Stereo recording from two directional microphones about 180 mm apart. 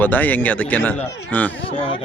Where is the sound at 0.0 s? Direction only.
10° left (ahead or behind).